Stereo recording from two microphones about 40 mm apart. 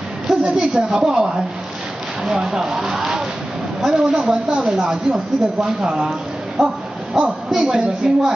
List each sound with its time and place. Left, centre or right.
0.3 s a woman's voice: centre
1.0 s speech: centre
2.2 s a woman's voice: centre
6.6 s speech: centre
7.2 s a woman's voice: centre